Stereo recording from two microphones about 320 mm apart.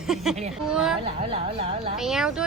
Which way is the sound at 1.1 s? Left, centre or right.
Centre.